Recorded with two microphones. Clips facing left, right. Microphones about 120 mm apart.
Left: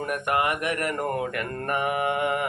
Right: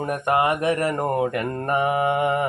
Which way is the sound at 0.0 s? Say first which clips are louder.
Right 4 dB; 30° right (ahead or behind).